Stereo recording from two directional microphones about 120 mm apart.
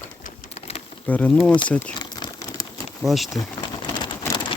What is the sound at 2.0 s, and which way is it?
Crumpling, 30° left (ahead or behind).